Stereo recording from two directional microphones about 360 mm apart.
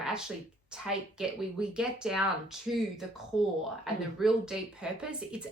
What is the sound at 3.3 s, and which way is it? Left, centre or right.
Speech, centre.